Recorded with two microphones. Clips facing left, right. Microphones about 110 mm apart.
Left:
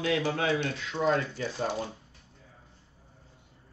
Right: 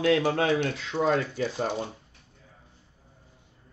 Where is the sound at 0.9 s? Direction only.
15° right (ahead or behind).